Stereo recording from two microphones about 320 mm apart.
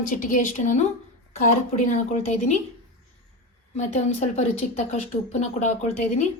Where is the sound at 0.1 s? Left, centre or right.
Left.